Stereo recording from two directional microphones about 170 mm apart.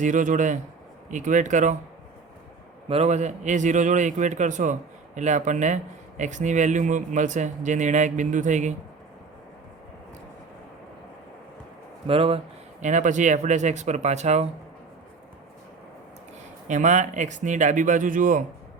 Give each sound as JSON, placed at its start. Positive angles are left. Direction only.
{"t": 0.0, "sound": "a man's voice", "side_deg": -50}
{"t": 2.9, "sound": "a man's voice", "side_deg": -40}
{"t": 12.0, "sound": "speech", "side_deg": -35}
{"t": 12.8, "sound": "a man's voice", "side_deg": -45}
{"t": 16.6, "sound": "a man's voice", "side_deg": -45}